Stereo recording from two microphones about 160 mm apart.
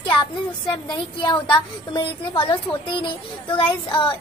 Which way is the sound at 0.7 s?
30° left (ahead or behind).